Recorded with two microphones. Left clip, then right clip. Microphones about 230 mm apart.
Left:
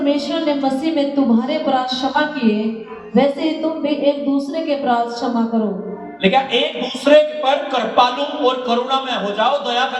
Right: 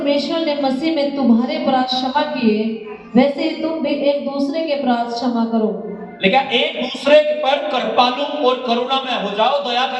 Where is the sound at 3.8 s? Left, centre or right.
Left.